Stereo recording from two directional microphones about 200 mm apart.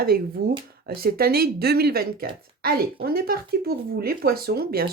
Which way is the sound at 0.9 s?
50° right (ahead or behind).